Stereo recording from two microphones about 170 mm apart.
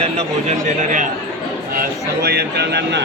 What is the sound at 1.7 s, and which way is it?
Speech, 65° right (ahead or behind).